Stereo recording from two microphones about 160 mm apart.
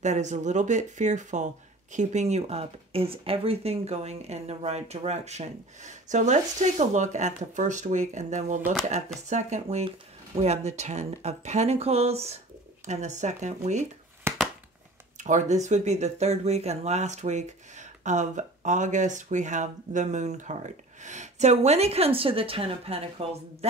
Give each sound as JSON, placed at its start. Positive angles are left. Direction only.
{"t": 0.0, "sound": "speech", "side_deg": -50}
{"t": 14.3, "sound": "a sound", "side_deg": -15}
{"t": 15.1, "sound": "speech", "side_deg": -50}